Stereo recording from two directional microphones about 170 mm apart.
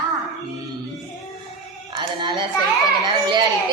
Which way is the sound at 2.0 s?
25° right (ahead or behind).